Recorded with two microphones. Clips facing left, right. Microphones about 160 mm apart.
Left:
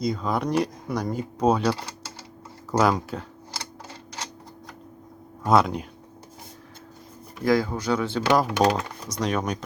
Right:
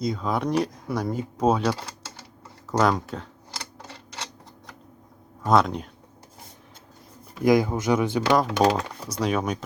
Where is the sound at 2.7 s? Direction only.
5° left (ahead or behind).